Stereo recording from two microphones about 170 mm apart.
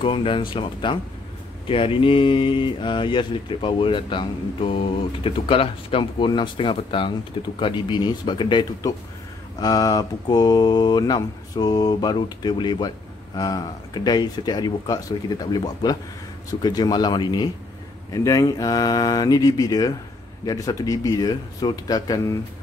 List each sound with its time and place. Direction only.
0.0 s speech: 30° left (ahead or behind)